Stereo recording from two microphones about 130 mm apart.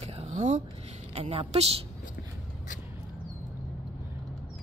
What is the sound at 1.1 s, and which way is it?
Speech, 50° right (ahead or behind).